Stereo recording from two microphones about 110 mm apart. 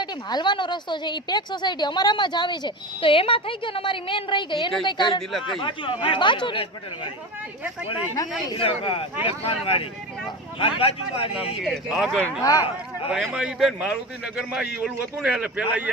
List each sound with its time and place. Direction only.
0.0 s a woman's voice: 40° left (ahead or behind)
8.5 s speech: 55° left (ahead or behind)
11.6 s speech: centre (ahead or behind)
12.4 s speech: 35° left (ahead or behind)
13.1 s a man's voice: 5° right (ahead or behind)